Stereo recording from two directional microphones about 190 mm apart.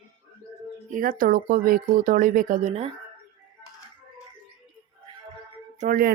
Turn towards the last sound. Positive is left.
turn(degrees=-50)  # may be behind; listen again after turning